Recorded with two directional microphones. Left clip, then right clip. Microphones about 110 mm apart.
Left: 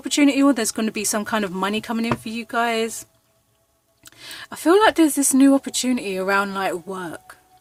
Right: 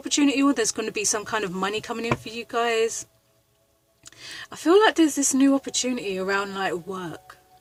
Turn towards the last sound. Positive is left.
turn(degrees=45)  # may be behind; listen again after turning